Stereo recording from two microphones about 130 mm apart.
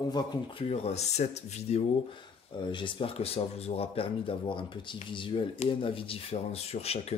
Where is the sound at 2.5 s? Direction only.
40° left (ahead or behind).